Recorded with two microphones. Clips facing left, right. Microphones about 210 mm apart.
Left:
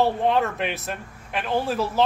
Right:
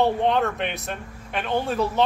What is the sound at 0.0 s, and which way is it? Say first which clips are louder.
Speech: even; centre (ahead or behind).